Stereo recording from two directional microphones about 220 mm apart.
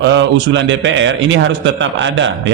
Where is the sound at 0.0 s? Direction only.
55° right (ahead or behind).